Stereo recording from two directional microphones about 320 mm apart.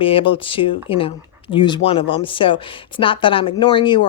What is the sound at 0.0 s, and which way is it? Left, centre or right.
A woman's voice, centre.